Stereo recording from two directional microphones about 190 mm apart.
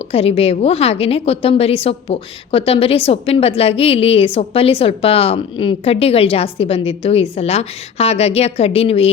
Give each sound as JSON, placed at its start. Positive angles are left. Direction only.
{"t": 0.1, "sound": "a woman's voice", "side_deg": 30}